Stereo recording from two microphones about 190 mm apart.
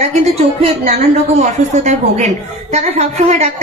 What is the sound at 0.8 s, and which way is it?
A man's voice, 40° right (ahead or behind).